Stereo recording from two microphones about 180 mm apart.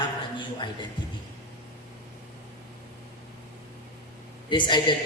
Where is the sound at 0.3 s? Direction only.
25° left (ahead or behind).